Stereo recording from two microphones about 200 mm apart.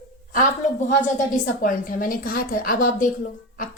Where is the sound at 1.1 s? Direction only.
40° left (ahead or behind).